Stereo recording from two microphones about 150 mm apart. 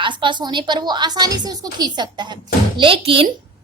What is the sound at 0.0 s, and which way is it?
A child's voice, 30° right (ahead or behind).